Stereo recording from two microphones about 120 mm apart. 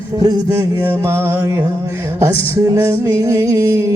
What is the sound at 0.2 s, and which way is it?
Speech, 35° right (ahead or behind).